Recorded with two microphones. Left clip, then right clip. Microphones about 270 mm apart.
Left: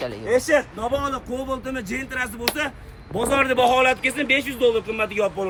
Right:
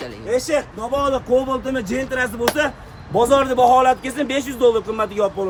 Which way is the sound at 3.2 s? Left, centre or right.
Centre.